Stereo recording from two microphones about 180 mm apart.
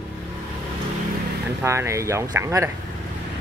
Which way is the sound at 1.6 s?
15° right (ahead or behind).